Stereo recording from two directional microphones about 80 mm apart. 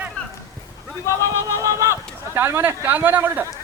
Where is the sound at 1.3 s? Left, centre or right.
Right.